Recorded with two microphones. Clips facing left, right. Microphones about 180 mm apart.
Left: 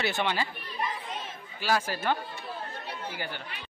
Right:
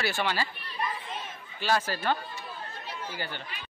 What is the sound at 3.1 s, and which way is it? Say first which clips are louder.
Speech: right 1 dB; 15° left (ahead or behind).